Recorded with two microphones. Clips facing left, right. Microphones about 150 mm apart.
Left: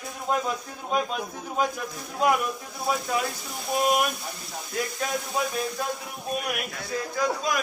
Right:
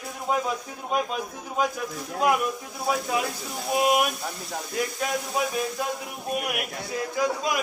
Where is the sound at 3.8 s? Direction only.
5° right (ahead or behind).